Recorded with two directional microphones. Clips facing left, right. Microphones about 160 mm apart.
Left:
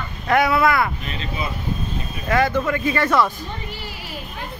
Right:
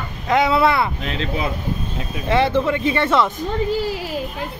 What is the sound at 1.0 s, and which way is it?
Speech, 90° right.